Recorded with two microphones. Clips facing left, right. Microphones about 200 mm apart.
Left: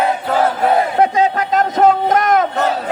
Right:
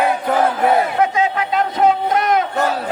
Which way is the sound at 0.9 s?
35° left (ahead or behind).